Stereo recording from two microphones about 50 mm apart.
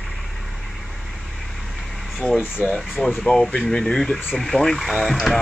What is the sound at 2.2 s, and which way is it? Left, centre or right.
Speech, left.